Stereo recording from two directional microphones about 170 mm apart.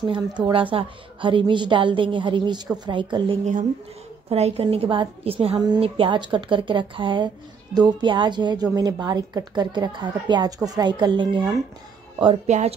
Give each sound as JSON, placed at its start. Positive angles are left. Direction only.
{"t": 0.0, "sound": "a woman's voice", "side_deg": -30}
{"t": 12.4, "sound": "speech", "side_deg": -40}